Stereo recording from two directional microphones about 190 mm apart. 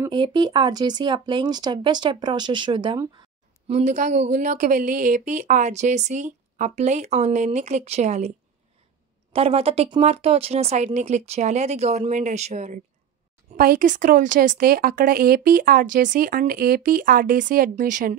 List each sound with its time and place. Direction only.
0.0 s speech: 25° right (ahead or behind)
3.7 s speech: 40° right (ahead or behind)
9.3 s speech: 30° right (ahead or behind)